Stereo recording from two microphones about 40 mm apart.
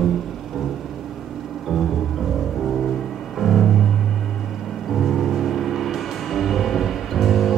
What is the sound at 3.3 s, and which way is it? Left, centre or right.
Music, centre.